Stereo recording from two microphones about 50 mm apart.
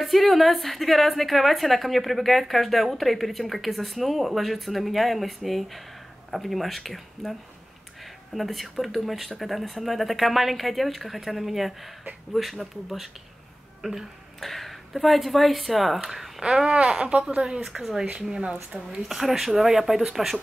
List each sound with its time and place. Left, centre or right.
0.0 s a woman's voice: centre
8.4 s a woman's voice: centre
13.8 s speech: centre
14.4 s a woman's voice: centre; by 17.6 s right
17.6 s a woman's voice: centre